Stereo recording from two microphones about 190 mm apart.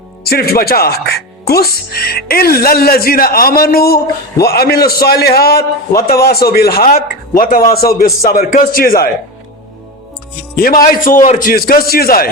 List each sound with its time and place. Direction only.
0.3 s a man's voice: 55° left (ahead or behind)
10.5 s a man's voice: 50° left (ahead or behind)